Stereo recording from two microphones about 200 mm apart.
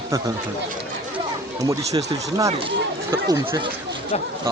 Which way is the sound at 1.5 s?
15° right (ahead or behind).